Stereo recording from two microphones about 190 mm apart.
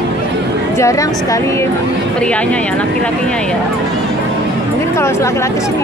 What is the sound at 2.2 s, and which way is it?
Speech, 5° left (ahead or behind).